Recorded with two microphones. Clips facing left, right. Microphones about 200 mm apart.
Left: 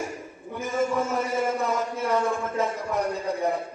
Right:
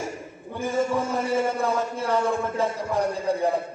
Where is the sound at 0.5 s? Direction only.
30° right (ahead or behind).